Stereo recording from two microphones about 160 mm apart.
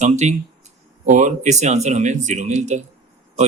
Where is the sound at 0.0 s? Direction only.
45° right (ahead or behind).